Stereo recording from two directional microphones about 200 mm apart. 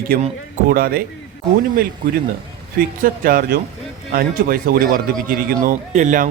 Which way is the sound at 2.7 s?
45° right (ahead or behind).